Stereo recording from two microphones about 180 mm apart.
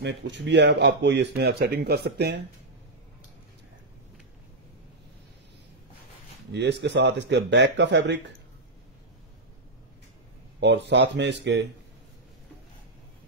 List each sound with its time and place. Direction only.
0.0 s speech: 70° right (ahead or behind)
6.5 s speech: 70° right (ahead or behind)
10.6 s speech: 75° right (ahead or behind)